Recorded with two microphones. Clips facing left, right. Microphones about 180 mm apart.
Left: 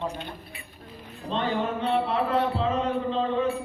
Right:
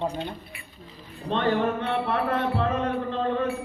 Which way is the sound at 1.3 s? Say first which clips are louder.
Right 3 dB; 60° right (ahead or behind).